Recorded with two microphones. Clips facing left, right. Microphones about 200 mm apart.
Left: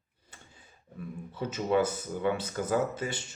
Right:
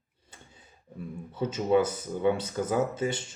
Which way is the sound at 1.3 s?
25° right (ahead or behind).